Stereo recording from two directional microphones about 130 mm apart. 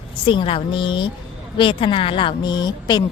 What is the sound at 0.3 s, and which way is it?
A woman's voice, 40° left (ahead or behind).